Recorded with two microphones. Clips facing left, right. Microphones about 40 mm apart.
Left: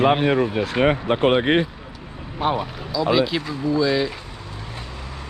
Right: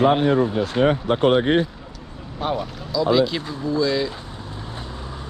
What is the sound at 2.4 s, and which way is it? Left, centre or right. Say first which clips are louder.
Speech: left 2 dB; left.